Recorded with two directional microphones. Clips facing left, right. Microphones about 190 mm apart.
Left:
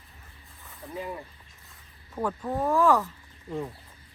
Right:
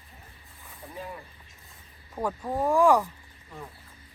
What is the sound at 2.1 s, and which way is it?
Speech, 10° right (ahead or behind).